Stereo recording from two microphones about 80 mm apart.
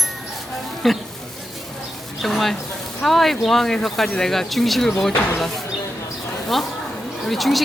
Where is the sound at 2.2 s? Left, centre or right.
Centre.